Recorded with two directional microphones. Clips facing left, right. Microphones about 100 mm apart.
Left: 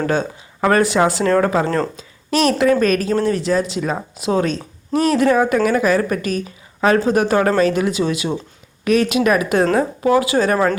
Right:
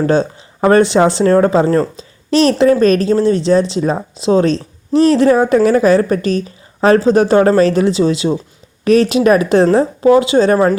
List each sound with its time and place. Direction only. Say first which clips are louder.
0.0 s a woman's voice: right 6 dB; 30° right (ahead or behind)